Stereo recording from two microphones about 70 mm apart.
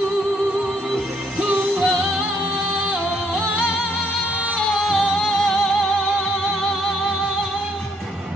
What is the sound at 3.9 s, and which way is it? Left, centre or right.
Music, centre.